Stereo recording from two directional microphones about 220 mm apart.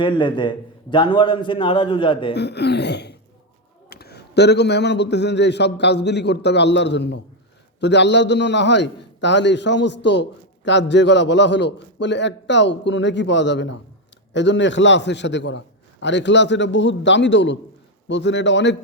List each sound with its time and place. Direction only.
0.0 s a man's voice: 20° left (ahead or behind)
2.3 s a man's voice: 50° left (ahead or behind)